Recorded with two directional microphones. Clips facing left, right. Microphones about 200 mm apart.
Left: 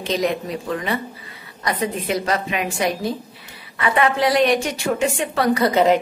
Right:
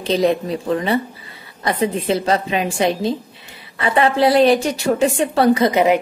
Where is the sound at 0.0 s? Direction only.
30° right (ahead or behind); by 5.9 s 15° right (ahead or behind).